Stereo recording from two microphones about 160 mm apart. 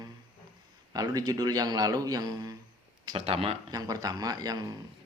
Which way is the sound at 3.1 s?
35° right (ahead or behind).